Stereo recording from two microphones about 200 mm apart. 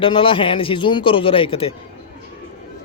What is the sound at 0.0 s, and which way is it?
Speech, 25° left (ahead or behind).